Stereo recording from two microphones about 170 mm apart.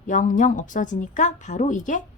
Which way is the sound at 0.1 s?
50° left (ahead or behind).